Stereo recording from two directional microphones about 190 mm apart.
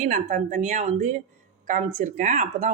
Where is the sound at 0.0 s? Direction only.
40° right (ahead or behind).